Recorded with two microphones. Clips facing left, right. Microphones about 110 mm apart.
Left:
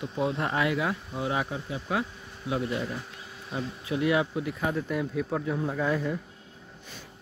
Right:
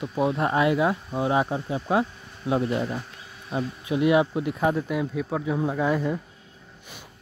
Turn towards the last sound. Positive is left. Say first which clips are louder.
# right 4 dB
turn(degrees=-10)  # may be behind; listen again after turning